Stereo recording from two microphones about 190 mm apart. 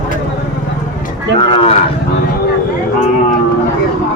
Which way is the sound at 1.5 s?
30° left (ahead or behind).